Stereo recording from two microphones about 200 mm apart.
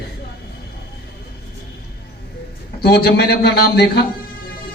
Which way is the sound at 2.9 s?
50° left (ahead or behind).